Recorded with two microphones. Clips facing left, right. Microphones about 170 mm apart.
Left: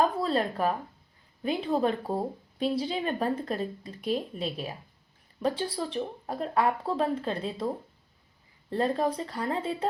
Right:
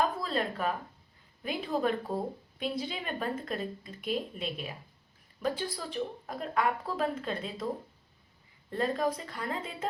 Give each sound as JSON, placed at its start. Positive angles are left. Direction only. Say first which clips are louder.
{"t": 0.0, "sound": "speech", "louder": "left 4 dB", "side_deg": 35}
{"t": 8.7, "sound": "speech", "louder": "left 3 dB", "side_deg": 30}